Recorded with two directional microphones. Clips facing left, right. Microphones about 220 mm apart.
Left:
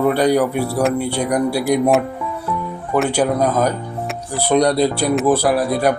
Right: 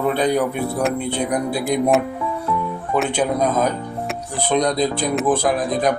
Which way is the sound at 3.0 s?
10° left (ahead or behind).